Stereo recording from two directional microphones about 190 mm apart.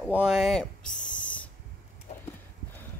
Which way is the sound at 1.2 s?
5° left (ahead or behind).